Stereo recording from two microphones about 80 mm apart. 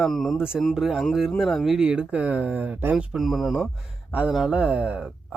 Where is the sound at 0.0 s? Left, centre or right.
Centre.